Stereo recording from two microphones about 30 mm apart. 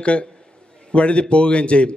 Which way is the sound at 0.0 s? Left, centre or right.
Left.